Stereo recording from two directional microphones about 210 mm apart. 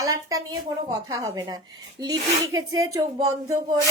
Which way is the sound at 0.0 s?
15° right (ahead or behind).